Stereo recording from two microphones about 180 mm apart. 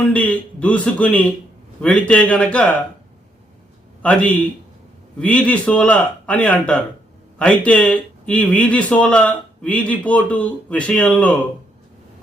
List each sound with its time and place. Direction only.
0.0 s speech: 5° left (ahead or behind)
4.0 s speech: 5° left (ahead or behind)